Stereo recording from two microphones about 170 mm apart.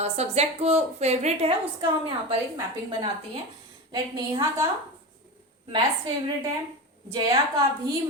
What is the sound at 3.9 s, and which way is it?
Speech, 20° right (ahead or behind).